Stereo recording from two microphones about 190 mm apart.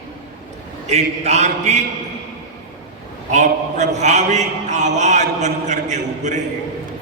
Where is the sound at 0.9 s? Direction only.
35° right (ahead or behind).